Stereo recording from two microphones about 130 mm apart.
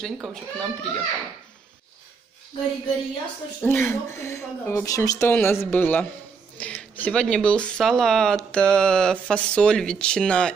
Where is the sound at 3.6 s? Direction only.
15° left (ahead or behind).